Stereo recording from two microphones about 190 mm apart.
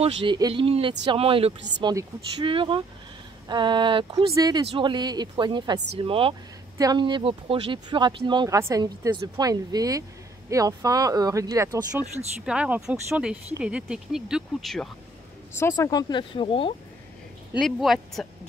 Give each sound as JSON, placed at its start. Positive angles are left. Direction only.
{"t": 0.0, "sound": "a woman's voice", "side_deg": -25}
{"t": 12.4, "sound": "speech", "side_deg": -5}
{"t": 15.5, "sound": "speech", "side_deg": 15}
{"t": 17.6, "sound": "speech", "side_deg": 0}